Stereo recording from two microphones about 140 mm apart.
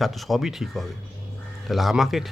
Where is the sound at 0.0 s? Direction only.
Centre (ahead or behind).